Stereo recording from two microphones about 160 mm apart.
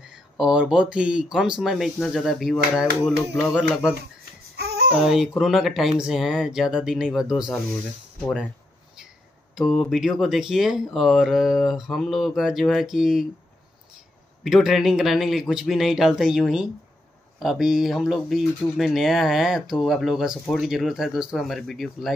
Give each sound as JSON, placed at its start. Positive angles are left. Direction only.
{"t": 0.1, "sound": "speech", "side_deg": -5}
{"t": 4.6, "sound": "babbling", "side_deg": -85}
{"t": 5.0, "sound": "speech", "side_deg": 0}
{"t": 9.6, "sound": "speech", "side_deg": 0}
{"t": 14.4, "sound": "speech", "side_deg": 0}